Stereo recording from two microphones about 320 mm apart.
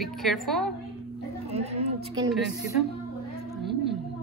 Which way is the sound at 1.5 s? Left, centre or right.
Centre.